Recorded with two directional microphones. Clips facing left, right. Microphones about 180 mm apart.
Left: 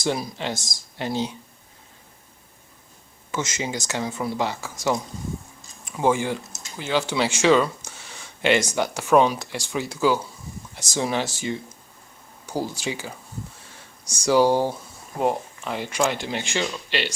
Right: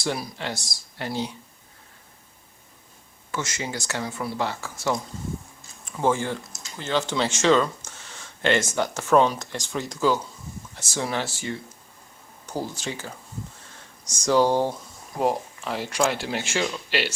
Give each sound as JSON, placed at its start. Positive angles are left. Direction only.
{"t": 0.0, "sound": "speech", "side_deg": 20}
{"t": 3.3, "sound": "speech", "side_deg": 20}
{"t": 14.2, "sound": "speech", "side_deg": 10}